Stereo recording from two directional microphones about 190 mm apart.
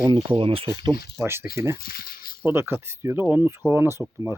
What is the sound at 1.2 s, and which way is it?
Speech, 10° right (ahead or behind).